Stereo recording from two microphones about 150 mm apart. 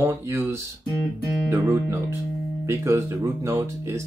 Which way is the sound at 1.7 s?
20° right (ahead or behind).